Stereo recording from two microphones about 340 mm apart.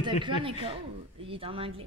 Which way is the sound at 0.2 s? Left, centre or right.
Centre.